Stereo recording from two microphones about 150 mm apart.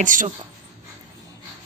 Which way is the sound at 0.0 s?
60° right (ahead or behind).